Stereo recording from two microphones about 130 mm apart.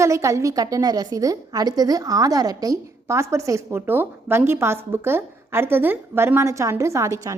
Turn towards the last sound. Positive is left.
turn(degrees=-25)  # may be behind; listen again after turning